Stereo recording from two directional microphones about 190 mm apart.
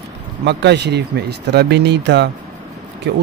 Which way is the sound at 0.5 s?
65° right (ahead or behind).